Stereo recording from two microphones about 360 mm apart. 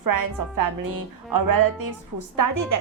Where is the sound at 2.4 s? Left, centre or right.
Right.